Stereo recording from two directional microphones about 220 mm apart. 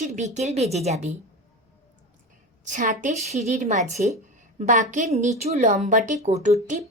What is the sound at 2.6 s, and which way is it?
A woman's voice, 35° right (ahead or behind).